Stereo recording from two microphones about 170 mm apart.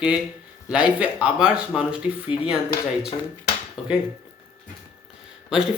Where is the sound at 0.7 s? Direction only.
5° right (ahead or behind).